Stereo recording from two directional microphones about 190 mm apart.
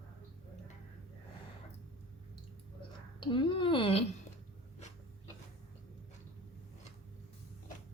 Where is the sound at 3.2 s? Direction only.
25° left (ahead or behind).